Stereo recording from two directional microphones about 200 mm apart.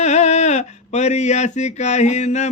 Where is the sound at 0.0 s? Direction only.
35° left (ahead or behind).